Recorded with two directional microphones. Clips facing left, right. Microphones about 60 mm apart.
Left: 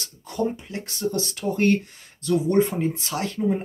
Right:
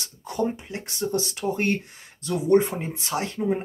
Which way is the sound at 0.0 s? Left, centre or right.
Right.